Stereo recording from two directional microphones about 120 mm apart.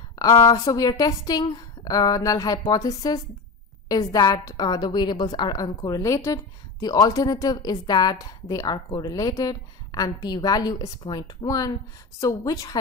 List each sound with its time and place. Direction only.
0.2 s a woman's voice: 35° left (ahead or behind)